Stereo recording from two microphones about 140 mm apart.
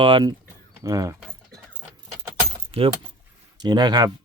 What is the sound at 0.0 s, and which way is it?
Speech, 35° right (ahead or behind).